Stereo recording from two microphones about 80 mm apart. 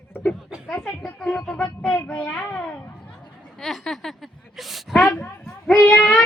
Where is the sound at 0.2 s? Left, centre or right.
Centre.